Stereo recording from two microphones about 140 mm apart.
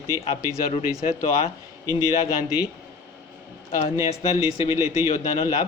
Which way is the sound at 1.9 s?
25° right (ahead or behind).